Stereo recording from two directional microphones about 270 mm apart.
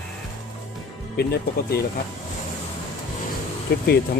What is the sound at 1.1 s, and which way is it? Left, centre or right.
Speech, left.